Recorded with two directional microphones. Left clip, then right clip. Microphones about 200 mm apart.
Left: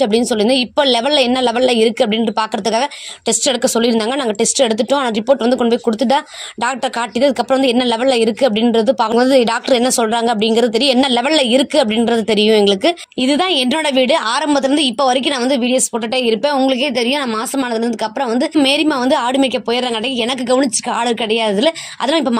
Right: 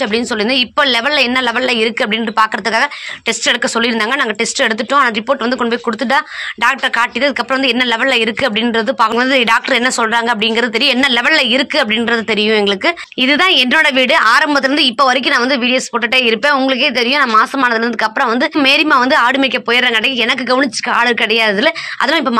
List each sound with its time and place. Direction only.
0.0 s a woman's voice: 60° left (ahead or behind)
13.6 s a woman's voice: 40° left (ahead or behind)